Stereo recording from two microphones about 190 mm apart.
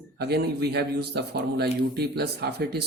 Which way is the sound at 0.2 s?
55° right (ahead or behind).